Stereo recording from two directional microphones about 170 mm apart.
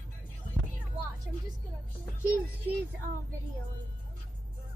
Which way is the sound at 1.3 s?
10° right (ahead or behind).